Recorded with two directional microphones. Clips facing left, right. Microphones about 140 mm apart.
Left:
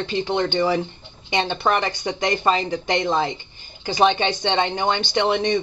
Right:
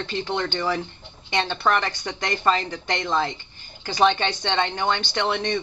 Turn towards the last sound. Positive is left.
turn(degrees=15)  # may be behind; listen again after turning